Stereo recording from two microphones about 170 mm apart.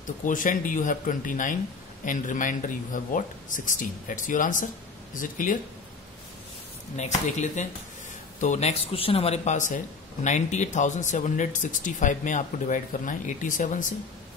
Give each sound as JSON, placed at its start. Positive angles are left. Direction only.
{"t": 0.0, "sound": "speech", "side_deg": 50}
{"t": 7.0, "sound": "speech", "side_deg": 45}